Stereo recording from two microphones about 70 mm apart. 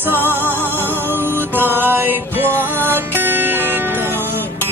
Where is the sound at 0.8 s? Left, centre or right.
Right.